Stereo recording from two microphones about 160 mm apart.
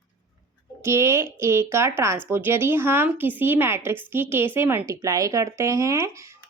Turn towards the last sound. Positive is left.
turn(degrees=-20)  # may be behind; listen again after turning